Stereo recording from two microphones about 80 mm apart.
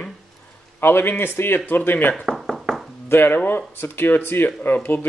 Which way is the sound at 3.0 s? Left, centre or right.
Left.